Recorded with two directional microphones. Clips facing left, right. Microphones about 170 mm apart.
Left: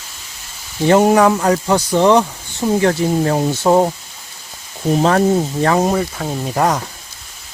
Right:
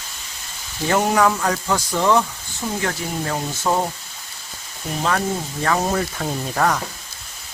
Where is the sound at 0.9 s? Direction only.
30° left (ahead or behind).